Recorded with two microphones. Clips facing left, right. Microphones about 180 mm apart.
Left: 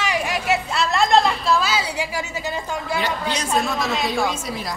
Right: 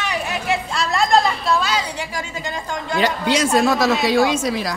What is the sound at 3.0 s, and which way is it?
Speech, 90° right.